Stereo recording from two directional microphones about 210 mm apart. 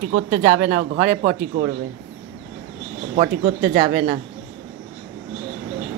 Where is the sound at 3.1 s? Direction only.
40° right (ahead or behind).